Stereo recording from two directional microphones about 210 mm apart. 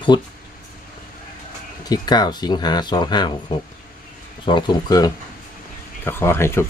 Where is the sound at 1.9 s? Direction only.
20° left (ahead or behind).